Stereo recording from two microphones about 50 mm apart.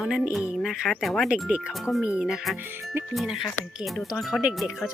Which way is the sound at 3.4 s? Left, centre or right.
Centre.